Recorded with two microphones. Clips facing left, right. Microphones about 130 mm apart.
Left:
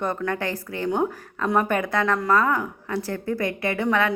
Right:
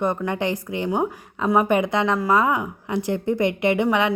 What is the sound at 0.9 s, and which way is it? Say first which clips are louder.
A woman's voice: left 1 dB; 5° right (ahead or behind).